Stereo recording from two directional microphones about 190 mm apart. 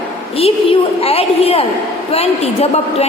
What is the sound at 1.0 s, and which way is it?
A woman's voice, 30° left (ahead or behind).